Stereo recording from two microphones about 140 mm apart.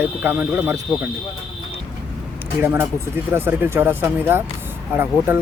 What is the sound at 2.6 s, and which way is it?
Speech, 15° right (ahead or behind).